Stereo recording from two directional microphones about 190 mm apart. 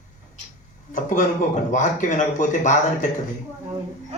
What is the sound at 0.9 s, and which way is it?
A man's voice, 40° left (ahead or behind).